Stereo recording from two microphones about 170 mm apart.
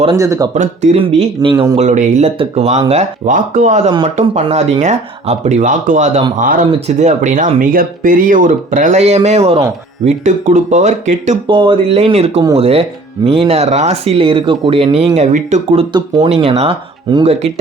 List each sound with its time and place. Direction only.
0.2 s speech: 20° right (ahead or behind)
0.5 s speech: 40° right (ahead or behind)
1.7 s speech: 45° right (ahead or behind)
6.7 s speech: 40° right (ahead or behind)
11.4 s speech: 30° right (ahead or behind)
16.3 s speech: 35° right (ahead or behind)